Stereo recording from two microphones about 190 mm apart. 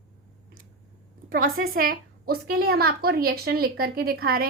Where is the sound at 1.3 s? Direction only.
50° right (ahead or behind).